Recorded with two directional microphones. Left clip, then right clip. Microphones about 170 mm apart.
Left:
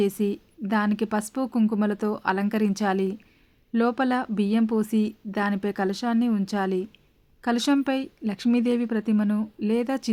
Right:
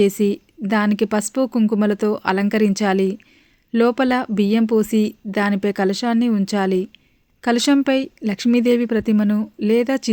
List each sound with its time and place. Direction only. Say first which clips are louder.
0.0 s a woman's voice: right 8 dB; 20° right (ahead or behind)